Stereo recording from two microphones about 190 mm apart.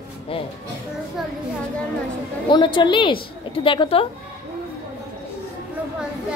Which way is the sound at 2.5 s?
25° left (ahead or behind).